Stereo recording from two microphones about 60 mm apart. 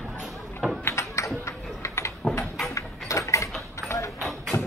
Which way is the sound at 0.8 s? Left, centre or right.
Left.